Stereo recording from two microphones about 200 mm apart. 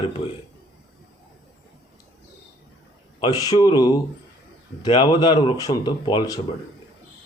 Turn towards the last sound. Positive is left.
turn(degrees=20)  # may be behind; listen again after turning